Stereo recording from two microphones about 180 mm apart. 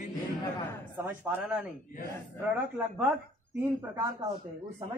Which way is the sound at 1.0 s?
10° right (ahead or behind).